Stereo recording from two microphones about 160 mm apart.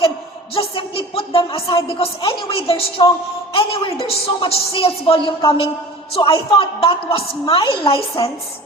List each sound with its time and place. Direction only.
0.5 s a woman's voice: 35° left (ahead or behind)